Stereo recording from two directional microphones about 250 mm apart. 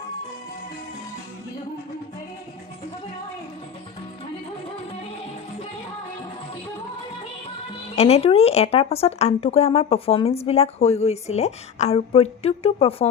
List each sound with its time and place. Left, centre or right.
7.9 s speech: left